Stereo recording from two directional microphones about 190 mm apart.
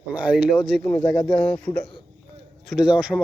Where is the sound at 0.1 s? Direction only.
5° right (ahead or behind).